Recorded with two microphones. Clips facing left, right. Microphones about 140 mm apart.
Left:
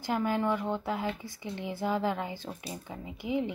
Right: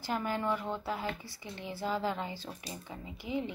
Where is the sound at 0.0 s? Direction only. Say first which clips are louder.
Left 4 dB; 15° left (ahead or behind).